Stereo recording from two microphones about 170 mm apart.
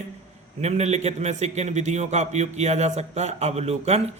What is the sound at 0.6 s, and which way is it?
A man's voice, 40° right (ahead or behind).